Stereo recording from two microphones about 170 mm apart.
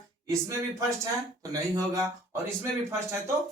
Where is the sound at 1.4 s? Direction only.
20° right (ahead or behind).